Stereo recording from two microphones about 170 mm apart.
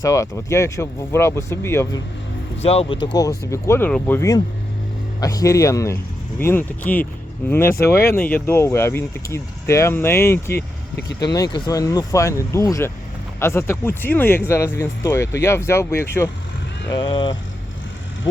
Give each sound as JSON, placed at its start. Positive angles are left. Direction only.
{"t": 0.0, "sound": "speech", "side_deg": 20}
{"t": 2.6, "sound": "speech", "side_deg": 35}
{"t": 3.2, "sound": "speech", "side_deg": 20}
{"t": 16.9, "sound": "speech", "side_deg": 25}